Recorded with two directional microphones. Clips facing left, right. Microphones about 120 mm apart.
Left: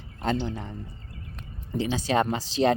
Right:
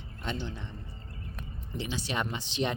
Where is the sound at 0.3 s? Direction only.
85° left.